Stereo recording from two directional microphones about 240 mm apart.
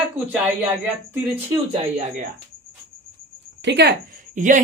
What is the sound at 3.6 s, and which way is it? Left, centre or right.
A woman's voice, right.